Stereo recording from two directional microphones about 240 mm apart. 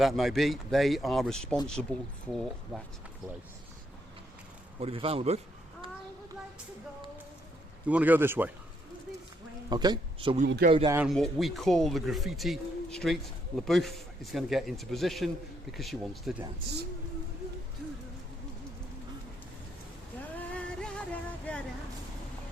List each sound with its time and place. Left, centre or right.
0.0 s speech: centre
4.8 s a man's voice: right
7.9 s a man's voice: centre
9.6 s speech: centre
10.4 s speech: right
10.7 s a man's voice: right
10.9 s speech: centre
20.3 s music: centre
21.5 s vehicle: centre